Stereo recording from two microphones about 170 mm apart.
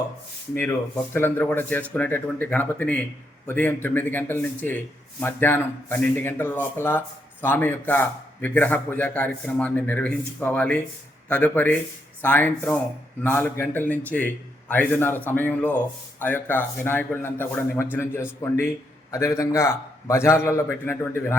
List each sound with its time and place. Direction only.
1.1 s speech: 10° left (ahead or behind)